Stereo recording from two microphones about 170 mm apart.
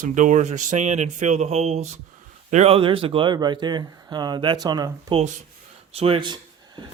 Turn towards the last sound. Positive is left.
turn(degrees=-25)  # may be behind; listen again after turning